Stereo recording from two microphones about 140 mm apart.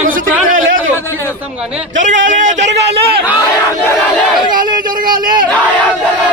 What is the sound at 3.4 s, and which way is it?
Battle cry, 20° left (ahead or behind).